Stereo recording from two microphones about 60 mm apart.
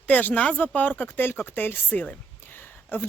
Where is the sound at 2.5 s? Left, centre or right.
Left.